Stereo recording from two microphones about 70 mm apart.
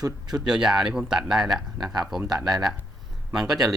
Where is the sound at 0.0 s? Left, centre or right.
Right.